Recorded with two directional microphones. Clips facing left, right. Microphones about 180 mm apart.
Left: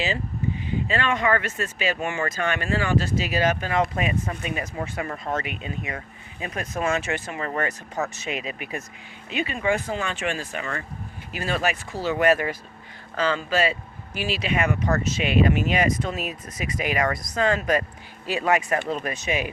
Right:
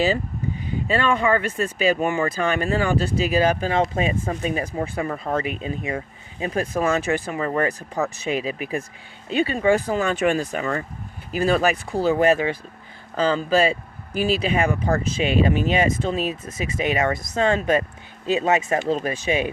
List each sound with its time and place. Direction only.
1.2 s speech: 35° right (ahead or behind)